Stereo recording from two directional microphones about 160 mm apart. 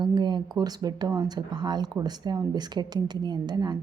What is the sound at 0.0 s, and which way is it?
Speech, 30° right (ahead or behind).